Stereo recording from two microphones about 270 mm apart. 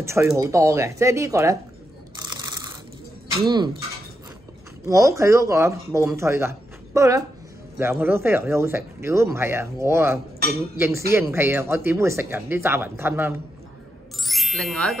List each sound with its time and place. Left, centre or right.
0.0 s speech: centre
2.1 s a sound: centre
3.4 s speech: centre
4.8 s speech: centre
14.2 s ding: centre